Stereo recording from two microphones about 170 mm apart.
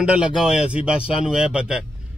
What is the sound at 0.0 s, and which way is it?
A man's voice, 5° right (ahead or behind).